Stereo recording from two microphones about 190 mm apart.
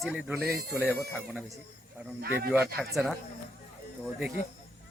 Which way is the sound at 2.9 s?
Centre (ahead or behind).